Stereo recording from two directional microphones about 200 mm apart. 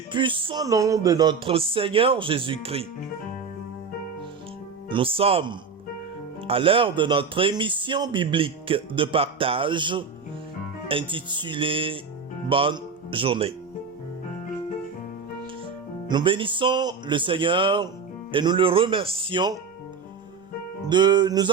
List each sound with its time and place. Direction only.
0.1 s speech: 25° right (ahead or behind)
4.9 s speech: 25° right (ahead or behind)
16.0 s speech: 25° right (ahead or behind)
20.8 s speech: 20° right (ahead or behind)